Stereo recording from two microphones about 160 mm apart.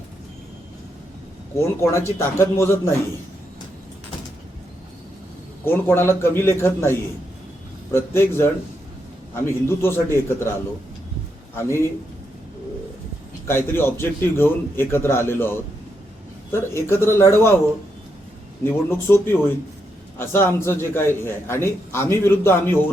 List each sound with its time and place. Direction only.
1.5 s a man's voice: 15° left (ahead or behind)
5.6 s a man's voice: 15° left (ahead or behind)
7.9 s a man's voice: 15° left (ahead or behind)
11.5 s a man's voice: 15° left (ahead or behind)
13.5 s a man's voice: 15° left (ahead or behind)
18.6 s a man's voice: 15° left (ahead or behind)